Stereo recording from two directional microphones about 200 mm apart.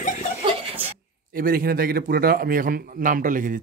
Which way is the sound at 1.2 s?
45° right (ahead or behind).